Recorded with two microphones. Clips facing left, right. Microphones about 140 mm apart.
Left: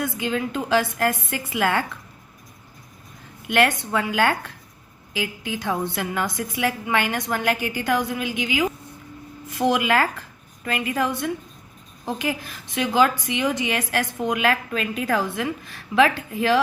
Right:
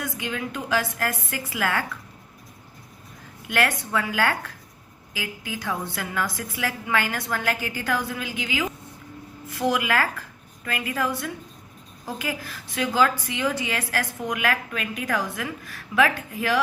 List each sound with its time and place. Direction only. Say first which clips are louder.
0.0 s a woman's voice: left 5 dB; 30° left (ahead or behind)
3.5 s a woman's voice: left 4 dB; 25° left (ahead or behind)